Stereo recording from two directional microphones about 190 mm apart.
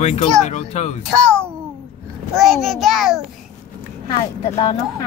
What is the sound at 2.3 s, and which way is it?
Speech, centre (ahead or behind).